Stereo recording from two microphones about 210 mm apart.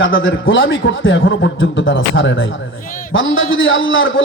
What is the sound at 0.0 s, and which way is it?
A man's voice, 70° left (ahead or behind).